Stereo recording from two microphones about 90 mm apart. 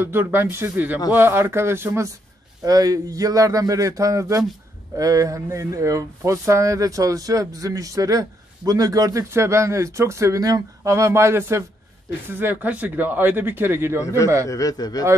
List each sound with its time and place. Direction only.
0.0 s speech: 25° right (ahead or behind)
2.6 s speech: 45° right (ahead or behind)
14.0 s a man's voice: 35° left (ahead or behind)